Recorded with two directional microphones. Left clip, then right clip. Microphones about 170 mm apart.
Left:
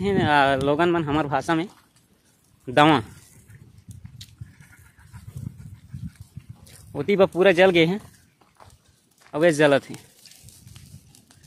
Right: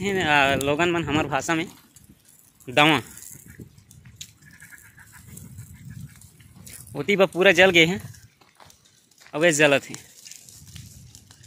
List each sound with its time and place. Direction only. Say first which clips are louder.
0.0 s speech: left 1 dB; 25° left (ahead or behind)
7.0 s speech: left 1 dB; 20° left (ahead or behind)
9.3 s speech: even; 25° left (ahead or behind)
10.8 s a sound: right 6 dB; 70° left (ahead or behind)